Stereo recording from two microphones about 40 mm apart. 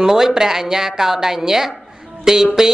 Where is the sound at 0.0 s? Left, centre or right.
Centre.